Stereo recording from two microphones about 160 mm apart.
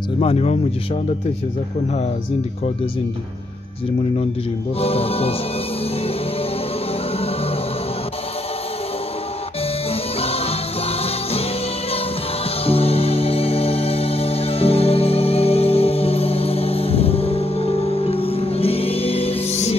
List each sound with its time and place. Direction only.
0.2 s music: 40° left (ahead or behind)
4.7 s music: 40° left (ahead or behind)
9.8 s music: 40° left (ahead or behind)
12.6 s music: 40° left (ahead or behind)